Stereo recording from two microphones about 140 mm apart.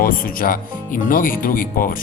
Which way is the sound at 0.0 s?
85° left.